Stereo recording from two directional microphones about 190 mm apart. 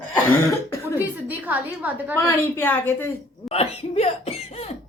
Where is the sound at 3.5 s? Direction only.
35° left (ahead or behind).